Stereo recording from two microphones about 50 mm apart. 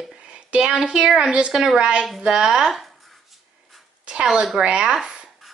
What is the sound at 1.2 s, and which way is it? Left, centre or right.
Speech, centre.